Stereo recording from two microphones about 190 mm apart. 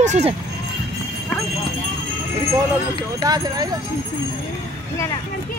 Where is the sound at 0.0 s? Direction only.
40° right (ahead or behind).